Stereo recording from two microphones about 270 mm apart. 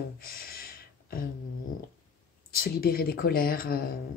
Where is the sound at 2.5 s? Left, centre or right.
Left.